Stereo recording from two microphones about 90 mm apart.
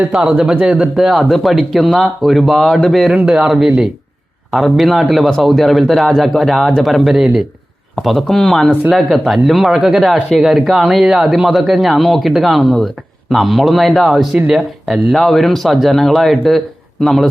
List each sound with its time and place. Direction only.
0.0 s speech: 10° right (ahead or behind)
8.7 s speech: 20° right (ahead or behind)
9.0 s speech: centre (ahead or behind)